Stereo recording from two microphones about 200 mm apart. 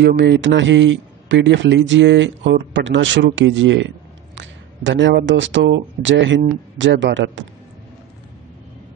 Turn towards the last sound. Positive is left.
turn(degrees=-65)  # may be behind; listen again after turning